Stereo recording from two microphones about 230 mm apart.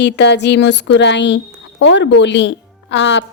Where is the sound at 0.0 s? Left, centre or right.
Left.